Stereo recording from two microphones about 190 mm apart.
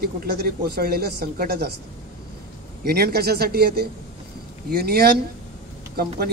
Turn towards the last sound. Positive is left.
turn(degrees=-55)  # may be behind; listen again after turning